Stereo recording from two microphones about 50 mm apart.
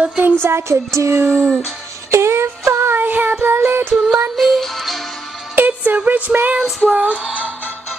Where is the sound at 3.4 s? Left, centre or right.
Right.